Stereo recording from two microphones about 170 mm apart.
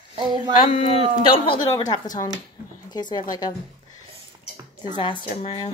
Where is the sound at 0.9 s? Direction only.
35° right (ahead or behind).